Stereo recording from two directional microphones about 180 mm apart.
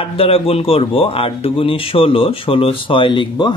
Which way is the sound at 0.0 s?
30° left (ahead or behind).